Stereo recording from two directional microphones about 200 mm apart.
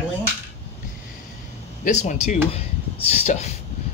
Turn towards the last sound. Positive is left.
turn(degrees=35)  # may be behind; listen again after turning